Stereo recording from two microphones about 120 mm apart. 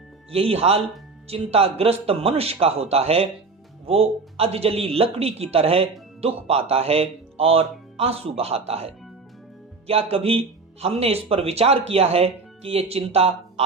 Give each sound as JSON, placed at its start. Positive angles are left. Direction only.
{"t": 0.3, "sound": "speech", "side_deg": -55}